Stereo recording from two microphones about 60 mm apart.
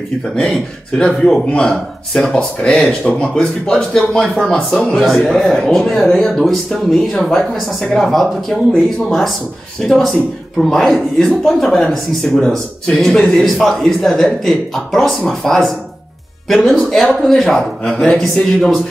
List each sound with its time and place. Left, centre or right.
0.4 s a man's voice: centre
12.9 s speech: centre
13.2 s a man's voice: centre